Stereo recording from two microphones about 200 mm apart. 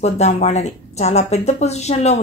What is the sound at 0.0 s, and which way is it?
Speech, 35° left (ahead or behind).